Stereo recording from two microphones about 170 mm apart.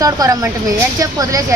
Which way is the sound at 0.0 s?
20° right (ahead or behind).